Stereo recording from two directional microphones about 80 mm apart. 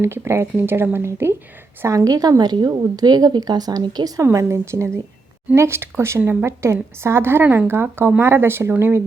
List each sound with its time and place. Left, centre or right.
0.0 s a woman's voice: right
4.2 s a woman's voice: right